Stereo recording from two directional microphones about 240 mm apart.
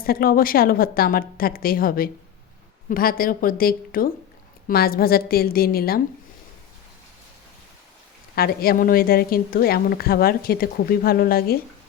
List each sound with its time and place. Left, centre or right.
0.0 s a woman's voice: left
8.4 s a woman's voice: left